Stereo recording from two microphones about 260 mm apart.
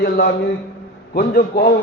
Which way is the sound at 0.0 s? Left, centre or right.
Left.